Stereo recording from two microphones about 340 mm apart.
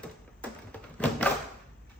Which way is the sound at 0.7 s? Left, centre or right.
Centre.